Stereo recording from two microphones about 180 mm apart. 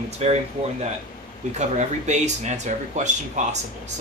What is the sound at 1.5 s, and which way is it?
Speech, 40° right (ahead or behind).